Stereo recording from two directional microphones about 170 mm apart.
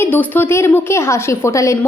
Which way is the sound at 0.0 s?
10° left (ahead or behind).